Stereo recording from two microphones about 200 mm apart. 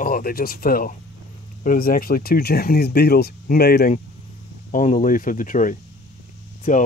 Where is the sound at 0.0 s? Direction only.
45° left (ahead or behind).